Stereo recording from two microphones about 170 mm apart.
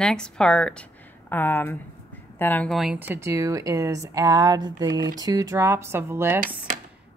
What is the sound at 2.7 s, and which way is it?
A woman's voice, 5° right (ahead or behind).